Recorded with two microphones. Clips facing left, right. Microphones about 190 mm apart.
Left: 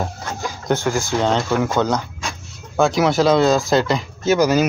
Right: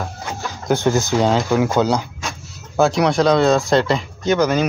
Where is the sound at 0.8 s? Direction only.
20° right (ahead or behind).